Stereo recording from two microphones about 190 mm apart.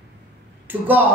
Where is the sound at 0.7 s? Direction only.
10° right (ahead or behind).